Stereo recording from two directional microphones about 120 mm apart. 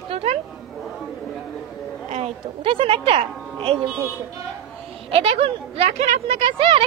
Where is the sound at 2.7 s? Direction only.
50° right (ahead or behind).